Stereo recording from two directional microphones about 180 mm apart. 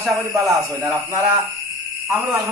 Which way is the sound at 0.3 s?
20° right (ahead or behind).